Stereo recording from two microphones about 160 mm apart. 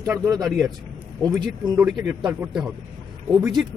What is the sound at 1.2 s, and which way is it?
Speech, 25° right (ahead or behind).